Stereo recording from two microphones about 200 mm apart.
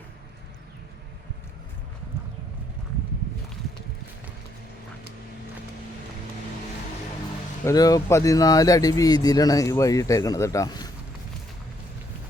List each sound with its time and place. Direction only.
7.6 s speech: 15° left (ahead or behind)